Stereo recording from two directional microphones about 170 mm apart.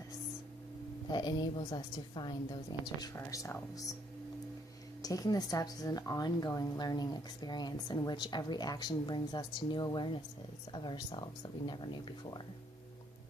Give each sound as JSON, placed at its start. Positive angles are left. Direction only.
{"t": 1.1, "sound": "a woman's voice", "side_deg": 25}
{"t": 5.0, "sound": "a woman's voice", "side_deg": 20}